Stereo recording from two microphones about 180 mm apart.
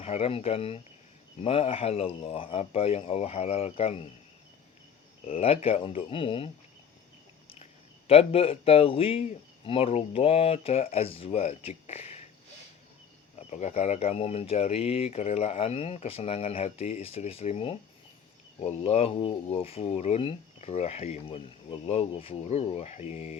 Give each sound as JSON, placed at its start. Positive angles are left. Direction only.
{"t": 0.0, "sound": "speech", "side_deg": 35}
{"t": 5.2, "sound": "speech", "side_deg": 35}
{"t": 13.5, "sound": "speech", "side_deg": 40}